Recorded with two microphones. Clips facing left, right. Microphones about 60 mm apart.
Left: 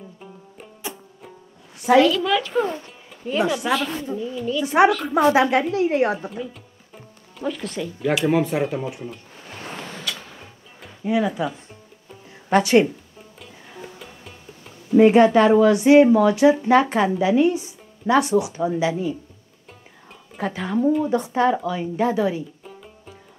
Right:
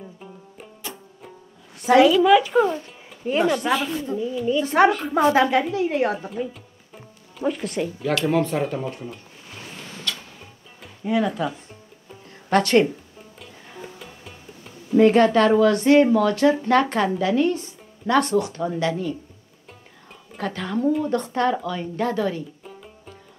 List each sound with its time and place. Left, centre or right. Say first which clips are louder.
2.0 s a woman's voice: right 4 dB; centre
3.6 s a woman's voice: even; centre
7.4 s a woman's voice: right 3 dB; centre
8.0 s speech: left 2 dB; centre
10.0 s music: even; centre
15.0 s speech: left 2 dB; centre
20.3 s speech: left 2 dB; centre
22.6 s music: even; centre